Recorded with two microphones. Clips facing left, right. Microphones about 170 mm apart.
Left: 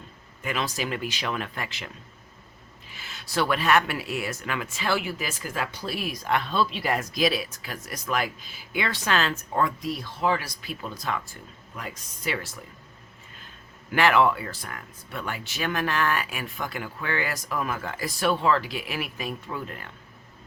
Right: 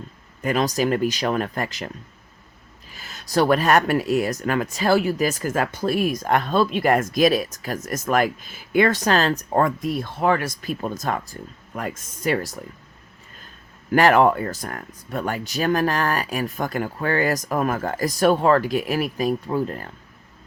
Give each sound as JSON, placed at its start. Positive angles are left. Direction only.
{"t": 0.4, "sound": "speech", "side_deg": -40}
{"t": 2.9, "sound": "speech", "side_deg": -40}
{"t": 13.9, "sound": "speech", "side_deg": -40}